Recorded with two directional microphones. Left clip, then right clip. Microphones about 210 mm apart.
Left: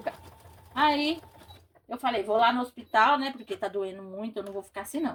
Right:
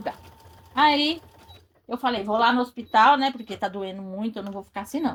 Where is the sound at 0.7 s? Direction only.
35° right (ahead or behind).